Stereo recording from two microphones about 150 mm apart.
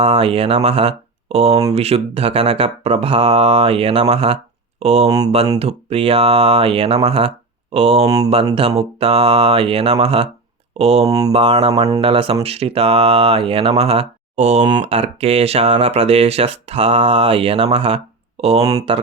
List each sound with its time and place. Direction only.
0.0 s speech: 40° right (ahead or behind)
5.0 s speech: 25° right (ahead or behind)
5.5 s speech: 45° right (ahead or behind)
8.0 s speech: 25° right (ahead or behind)
8.8 s speech: 40° right (ahead or behind)
18.6 s speech: 25° right (ahead or behind)